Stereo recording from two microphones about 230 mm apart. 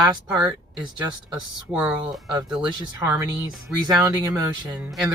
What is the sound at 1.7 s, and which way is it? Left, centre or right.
Speech, centre.